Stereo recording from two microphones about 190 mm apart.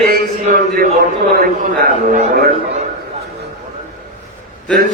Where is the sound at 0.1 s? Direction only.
50° right (ahead or behind).